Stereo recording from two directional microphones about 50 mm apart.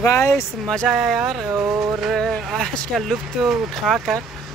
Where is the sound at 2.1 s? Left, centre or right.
Centre.